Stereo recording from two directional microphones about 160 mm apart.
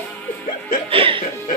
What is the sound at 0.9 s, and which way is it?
Music, 35° right (ahead or behind).